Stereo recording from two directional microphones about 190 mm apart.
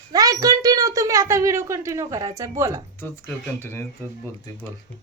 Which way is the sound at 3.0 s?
10° left (ahead or behind).